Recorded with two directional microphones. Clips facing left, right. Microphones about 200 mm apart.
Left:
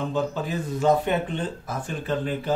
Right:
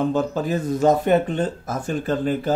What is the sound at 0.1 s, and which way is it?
Speech, 45° right (ahead or behind).